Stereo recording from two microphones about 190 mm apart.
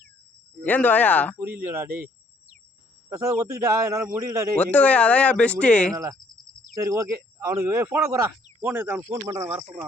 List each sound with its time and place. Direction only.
0.6 s speech: 10° left (ahead or behind)
1.4 s speech: 15° right (ahead or behind)
3.1 s speech: 15° right (ahead or behind)
4.5 s speech: 10° left (ahead or behind)
5.9 s speech: 20° right (ahead or behind)